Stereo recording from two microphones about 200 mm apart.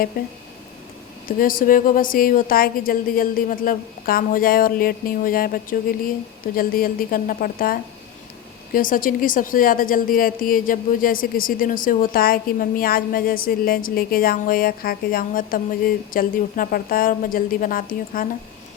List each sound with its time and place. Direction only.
0.1 s a woman's voice: 45° left (ahead or behind)
1.4 s a woman's voice: 45° left (ahead or behind)